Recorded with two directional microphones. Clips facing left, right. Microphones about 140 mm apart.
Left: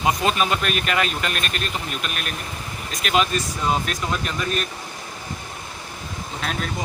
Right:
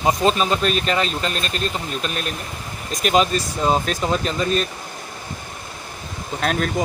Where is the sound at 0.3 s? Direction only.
30° right (ahead or behind).